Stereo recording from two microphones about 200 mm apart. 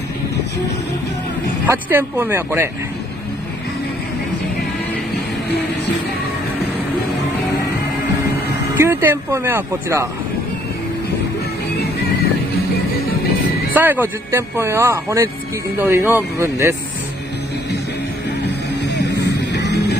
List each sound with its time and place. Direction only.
1.7 s speech: 10° right (ahead or behind)
8.7 s speech: 10° right (ahead or behind)
13.7 s speech: 10° right (ahead or behind)
18.8 s music: 60° left (ahead or behind)